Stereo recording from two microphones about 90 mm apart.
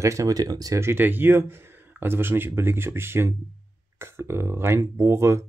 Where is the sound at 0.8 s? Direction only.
25° right (ahead or behind).